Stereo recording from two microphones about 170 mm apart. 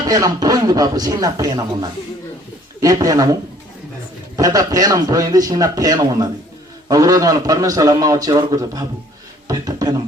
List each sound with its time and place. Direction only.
0.0 s a man's voice: 20° right (ahead or behind)
4.4 s a man's voice: 20° right (ahead or behind)